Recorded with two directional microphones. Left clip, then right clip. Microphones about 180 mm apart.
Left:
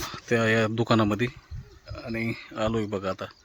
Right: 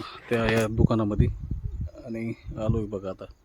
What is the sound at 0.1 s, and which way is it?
Speech, centre (ahead or behind).